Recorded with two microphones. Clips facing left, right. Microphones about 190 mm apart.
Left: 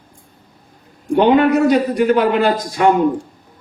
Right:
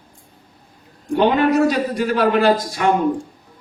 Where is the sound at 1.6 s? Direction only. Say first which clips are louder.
Left 5 dB; 20° left (ahead or behind).